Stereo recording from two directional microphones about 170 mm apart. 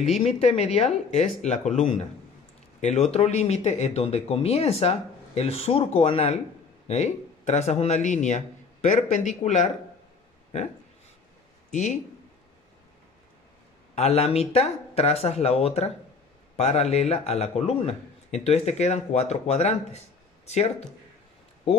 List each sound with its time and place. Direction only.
0.4 s speech: 35° left (ahead or behind)
2.8 s speech: 40° left (ahead or behind)
11.7 s speech: 45° left (ahead or behind)
13.9 s speech: 40° left (ahead or behind)